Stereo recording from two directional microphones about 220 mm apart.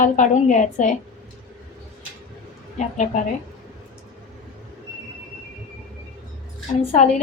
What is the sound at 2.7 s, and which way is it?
Speech, 35° left (ahead or behind).